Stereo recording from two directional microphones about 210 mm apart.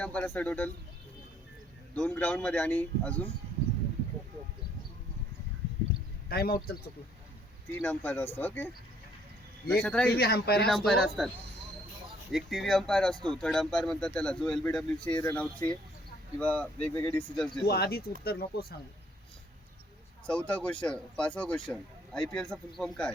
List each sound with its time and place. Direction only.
0.0 s speech: 5° left (ahead or behind)
2.0 s speech: 5° left (ahead or behind)
6.2 s speech: 45° left (ahead or behind)
7.8 s speech: 5° left (ahead or behind)
10.1 s speech: 50° left (ahead or behind)
10.7 s speech: centre (ahead or behind)
12.3 s speech: centre (ahead or behind)
17.7 s speech: 50° left (ahead or behind)
20.2 s speech: 5° left (ahead or behind)